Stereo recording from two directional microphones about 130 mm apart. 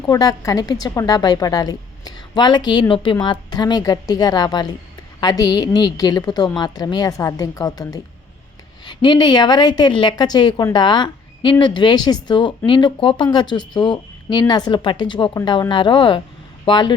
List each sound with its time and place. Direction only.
0.0 s a woman's voice: 30° left (ahead or behind)